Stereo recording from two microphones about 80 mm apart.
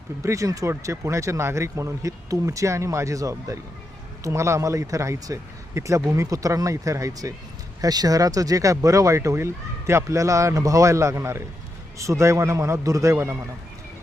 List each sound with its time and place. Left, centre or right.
0.2 s speech: right